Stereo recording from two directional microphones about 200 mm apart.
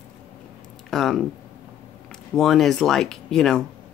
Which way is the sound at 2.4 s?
Centre (ahead or behind).